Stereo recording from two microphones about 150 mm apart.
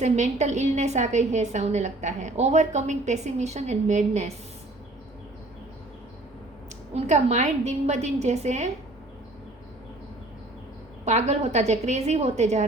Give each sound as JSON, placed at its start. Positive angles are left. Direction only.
{"t": 0.0, "sound": "a woman's voice", "side_deg": -50}
{"t": 6.9, "sound": "a woman's voice", "side_deg": -50}
{"t": 11.0, "sound": "a woman's voice", "side_deg": -50}